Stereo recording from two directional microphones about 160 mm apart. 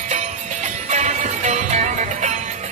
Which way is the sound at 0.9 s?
45° right (ahead or behind).